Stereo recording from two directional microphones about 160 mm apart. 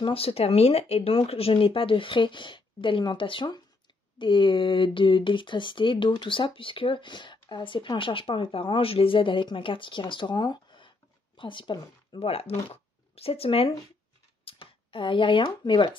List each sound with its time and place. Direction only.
0.0 s speech: 35° left (ahead or behind)